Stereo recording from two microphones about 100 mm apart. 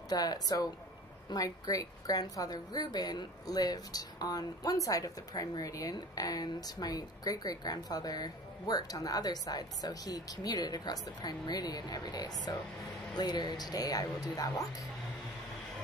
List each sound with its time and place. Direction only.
0.1 s a woman's voice: 40° left (ahead or behind)